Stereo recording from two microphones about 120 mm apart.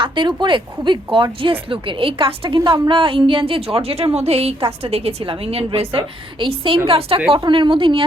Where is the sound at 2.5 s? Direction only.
40° right (ahead or behind).